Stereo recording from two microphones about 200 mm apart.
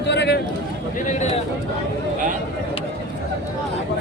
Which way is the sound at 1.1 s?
35° left (ahead or behind).